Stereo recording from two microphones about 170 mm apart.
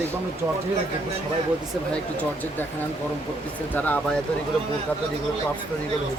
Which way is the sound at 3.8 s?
10° left (ahead or behind).